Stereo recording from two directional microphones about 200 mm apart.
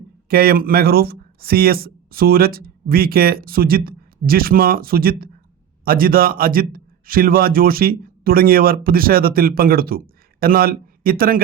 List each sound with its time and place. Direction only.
0.3 s a man's voice: 50° right (ahead or behind)